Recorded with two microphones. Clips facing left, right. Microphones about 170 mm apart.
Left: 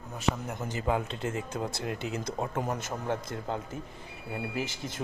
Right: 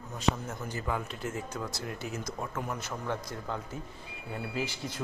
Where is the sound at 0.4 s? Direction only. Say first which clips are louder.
Left 4 dB; 20° left (ahead or behind).